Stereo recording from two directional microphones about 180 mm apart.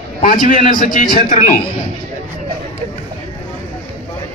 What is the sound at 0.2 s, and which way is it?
Speech, 45° left (ahead or behind).